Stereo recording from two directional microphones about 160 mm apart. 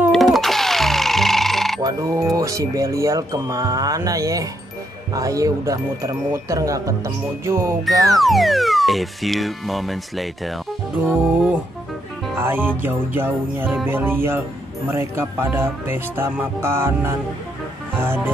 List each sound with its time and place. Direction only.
0.1 s music: centre (ahead or behind)
1.8 s music: 20° right (ahead or behind)
2.3 s speech: 20° right (ahead or behind)
8.2 s speech: centre (ahead or behind)
12.4 s speech: 15° right (ahead or behind)